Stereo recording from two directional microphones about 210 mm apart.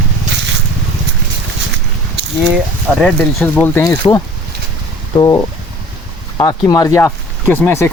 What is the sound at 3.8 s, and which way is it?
Speech, 15° left (ahead or behind).